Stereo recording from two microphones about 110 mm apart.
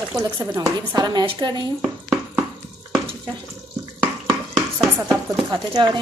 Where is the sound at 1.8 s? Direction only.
5° right (ahead or behind).